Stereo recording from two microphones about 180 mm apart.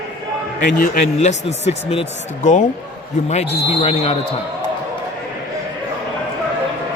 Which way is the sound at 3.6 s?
35° left (ahead or behind).